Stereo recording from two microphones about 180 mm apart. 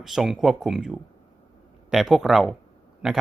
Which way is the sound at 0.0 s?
Centre (ahead or behind).